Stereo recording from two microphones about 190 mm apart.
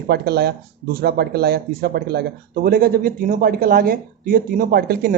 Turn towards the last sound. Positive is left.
turn(degrees=-55)  # may be behind; listen again after turning